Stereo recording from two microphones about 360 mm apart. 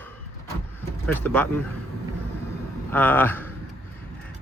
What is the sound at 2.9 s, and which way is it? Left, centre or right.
Speech, centre.